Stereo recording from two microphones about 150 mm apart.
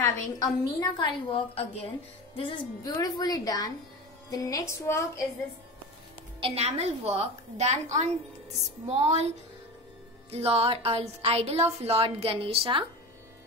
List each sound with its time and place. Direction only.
0.0 s a woman's voice: 20° left (ahead or behind)
6.4 s a woman's voice: 45° right (ahead or behind)
8.8 s a woman's voice: 45° right (ahead or behind)
10.3 s a woman's voice: 40° right (ahead or behind)